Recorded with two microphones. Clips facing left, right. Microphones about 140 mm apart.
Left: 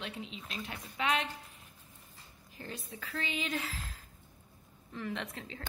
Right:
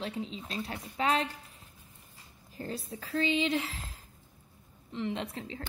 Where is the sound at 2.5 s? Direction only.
35° right (ahead or behind).